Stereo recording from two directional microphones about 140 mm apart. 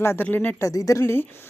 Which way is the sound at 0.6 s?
25° left (ahead or behind).